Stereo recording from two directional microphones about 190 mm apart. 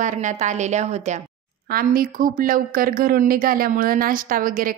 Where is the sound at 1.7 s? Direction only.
50° right (ahead or behind).